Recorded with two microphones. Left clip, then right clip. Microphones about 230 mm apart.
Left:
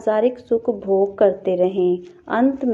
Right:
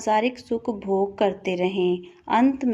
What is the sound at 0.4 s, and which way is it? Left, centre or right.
A woman's voice, right.